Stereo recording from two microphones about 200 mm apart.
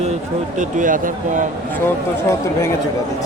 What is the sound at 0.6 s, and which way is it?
Speech, 40° right (ahead or behind).